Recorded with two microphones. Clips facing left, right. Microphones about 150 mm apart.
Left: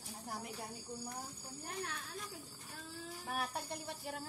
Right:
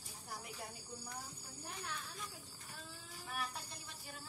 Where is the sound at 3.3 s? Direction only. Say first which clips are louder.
Left 5 dB; 65° left (ahead or behind).